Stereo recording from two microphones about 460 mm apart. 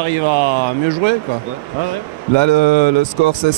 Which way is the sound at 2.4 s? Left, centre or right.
Right.